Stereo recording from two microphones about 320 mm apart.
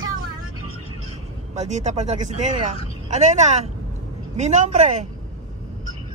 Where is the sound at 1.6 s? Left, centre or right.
Right.